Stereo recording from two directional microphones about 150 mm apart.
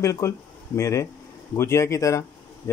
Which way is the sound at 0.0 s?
20° left (ahead or behind).